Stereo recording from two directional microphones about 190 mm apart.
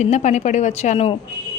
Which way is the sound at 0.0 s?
40° left (ahead or behind).